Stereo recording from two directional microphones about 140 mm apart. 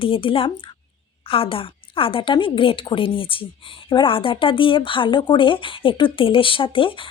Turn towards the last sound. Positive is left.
turn(degrees=40)  # may be behind; listen again after turning